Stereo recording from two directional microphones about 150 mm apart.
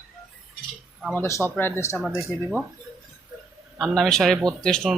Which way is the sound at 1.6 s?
15° left (ahead or behind).